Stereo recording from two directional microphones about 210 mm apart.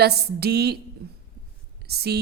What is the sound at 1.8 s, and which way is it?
Speech, 50° right (ahead or behind).